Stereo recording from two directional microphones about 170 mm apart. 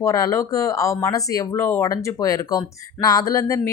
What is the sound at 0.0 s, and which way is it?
Speech, 20° left (ahead or behind).